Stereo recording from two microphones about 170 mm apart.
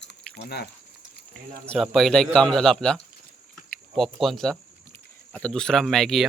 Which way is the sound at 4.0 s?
Centre (ahead or behind).